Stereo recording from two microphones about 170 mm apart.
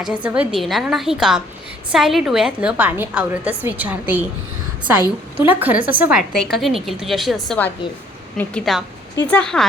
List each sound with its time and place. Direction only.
0.0 s a woman's voice: 5° right (ahead or behind)
5.4 s a woman's voice: 10° right (ahead or behind)